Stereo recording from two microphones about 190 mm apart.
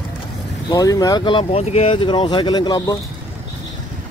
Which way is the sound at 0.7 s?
20° left (ahead or behind).